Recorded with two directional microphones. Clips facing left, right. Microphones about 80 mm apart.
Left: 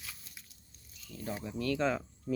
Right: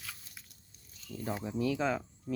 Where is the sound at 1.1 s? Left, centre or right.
Right; by 2.0 s centre.